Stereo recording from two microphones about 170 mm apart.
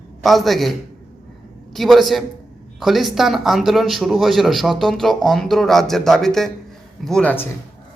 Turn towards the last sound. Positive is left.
turn(degrees=10)  # may be behind; listen again after turning